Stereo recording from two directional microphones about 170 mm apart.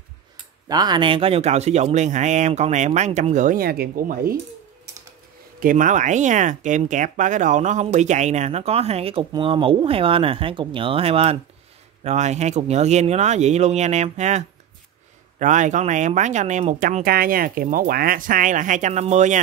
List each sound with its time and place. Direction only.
0.7 s speech: 25° right (ahead or behind); by 4.4 s 60° right (ahead or behind)
5.6 s speech: 50° right (ahead or behind)
17.0 s speech: 60° right (ahead or behind); by 19.4 s 45° right (ahead or behind)